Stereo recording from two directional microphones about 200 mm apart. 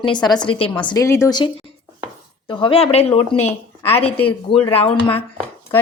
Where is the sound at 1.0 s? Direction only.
15° left (ahead or behind); by 3.2 s 30° left (ahead or behind).